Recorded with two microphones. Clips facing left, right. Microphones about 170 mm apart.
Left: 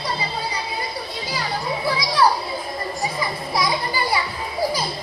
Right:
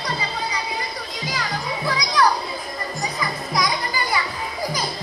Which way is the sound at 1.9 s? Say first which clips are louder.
Left 1 dB; 30° left (ahead or behind).